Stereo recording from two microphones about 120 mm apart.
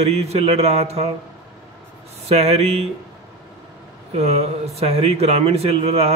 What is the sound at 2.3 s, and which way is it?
Speech, 60° right (ahead or behind).